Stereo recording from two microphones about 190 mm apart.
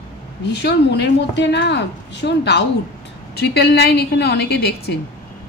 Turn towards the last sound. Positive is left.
turn(degrees=55)  # may be behind; listen again after turning